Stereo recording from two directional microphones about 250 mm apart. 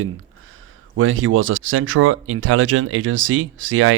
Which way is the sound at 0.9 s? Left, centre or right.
Right.